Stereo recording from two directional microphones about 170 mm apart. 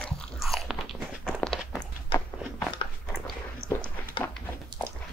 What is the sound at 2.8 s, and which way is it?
Biting, 30° left (ahead or behind).